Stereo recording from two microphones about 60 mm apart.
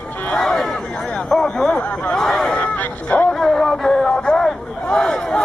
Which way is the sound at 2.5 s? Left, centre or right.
Left.